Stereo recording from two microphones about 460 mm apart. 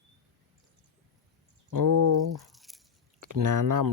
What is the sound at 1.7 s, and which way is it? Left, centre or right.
Speech, right.